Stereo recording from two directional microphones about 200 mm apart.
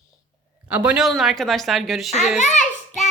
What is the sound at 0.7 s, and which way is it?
Speech, 5° right (ahead or behind).